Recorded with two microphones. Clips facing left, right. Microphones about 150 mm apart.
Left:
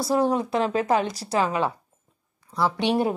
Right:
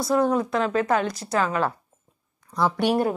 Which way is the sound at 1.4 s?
5° left (ahead or behind).